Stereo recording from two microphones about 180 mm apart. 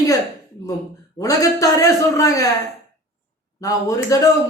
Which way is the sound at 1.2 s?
20° left (ahead or behind).